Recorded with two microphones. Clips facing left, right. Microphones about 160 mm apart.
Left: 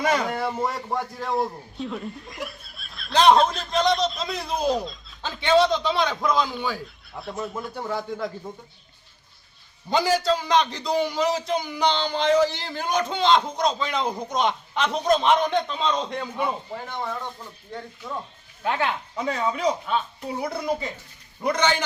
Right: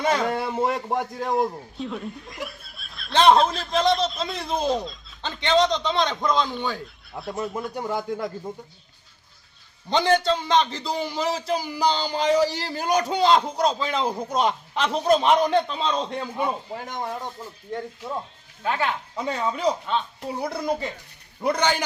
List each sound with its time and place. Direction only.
0.0 s speech: 5° left (ahead or behind)
0.3 s speech: 25° right (ahead or behind)
1.7 s speech: centre (ahead or behind)
7.8 s speech: 10° right (ahead or behind)
9.9 s speech: 5° left (ahead or behind)
12.5 s a man's voice: 35° right (ahead or behind)
12.7 s speech: 10° right (ahead or behind)
18.6 s speech: 15° left (ahead or behind)
19.1 s speech: centre (ahead or behind)